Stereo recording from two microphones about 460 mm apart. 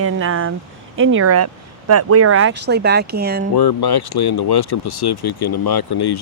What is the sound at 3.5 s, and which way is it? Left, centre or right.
Speech, left.